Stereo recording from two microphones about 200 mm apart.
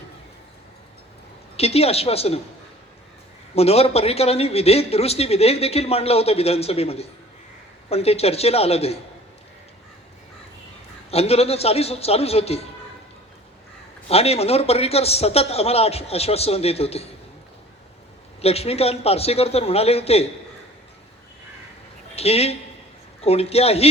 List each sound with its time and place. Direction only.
1.5 s speech: 30° left (ahead or behind)
3.5 s speech: 30° left (ahead or behind)
11.1 s speech: 30° left (ahead or behind)
14.1 s speech: 30° left (ahead or behind)
18.4 s speech: 30° left (ahead or behind)
22.1 s speech: 30° left (ahead or behind)